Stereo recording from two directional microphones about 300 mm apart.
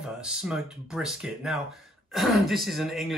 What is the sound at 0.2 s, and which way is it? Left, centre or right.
Speech, centre.